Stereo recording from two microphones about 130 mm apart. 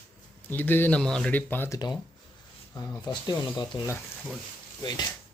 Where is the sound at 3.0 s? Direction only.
30° left (ahead or behind).